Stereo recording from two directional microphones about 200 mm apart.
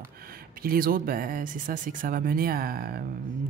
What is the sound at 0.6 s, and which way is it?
Speech, 45° right (ahead or behind).